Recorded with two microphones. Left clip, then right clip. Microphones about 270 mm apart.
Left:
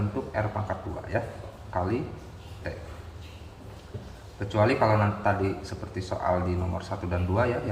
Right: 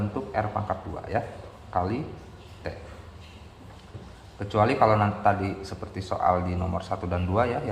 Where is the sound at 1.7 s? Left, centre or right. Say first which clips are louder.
Right 2 dB; centre.